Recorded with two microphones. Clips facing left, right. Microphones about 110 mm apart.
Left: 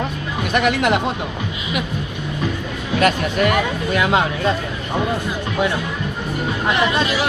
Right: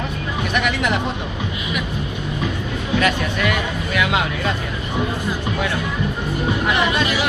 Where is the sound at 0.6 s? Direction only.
45° left (ahead or behind).